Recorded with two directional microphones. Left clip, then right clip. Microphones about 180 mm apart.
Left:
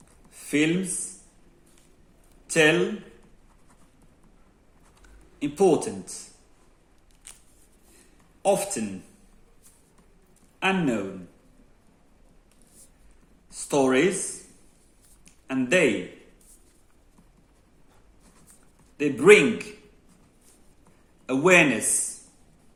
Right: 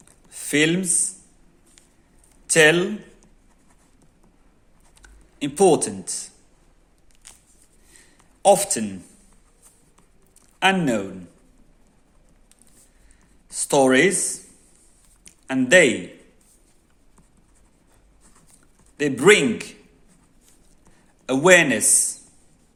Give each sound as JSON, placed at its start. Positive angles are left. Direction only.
{"t": 0.3, "sound": "a sound", "side_deg": -55}
{"t": 2.5, "sound": "a man's voice", "side_deg": -55}
{"t": 5.0, "sound": "speech", "side_deg": -50}
{"t": 8.4, "sound": "speech", "side_deg": -55}
{"t": 10.6, "sound": "a man's voice", "side_deg": -55}
{"t": 13.5, "sound": "speech", "side_deg": -50}
{"t": 15.2, "sound": "a sound", "side_deg": -55}
{"t": 18.9, "sound": "a man's voice", "side_deg": -55}
{"t": 21.2, "sound": "a man's voice", "side_deg": -55}